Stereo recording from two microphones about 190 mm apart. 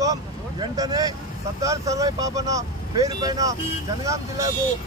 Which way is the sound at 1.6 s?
15° right (ahead or behind).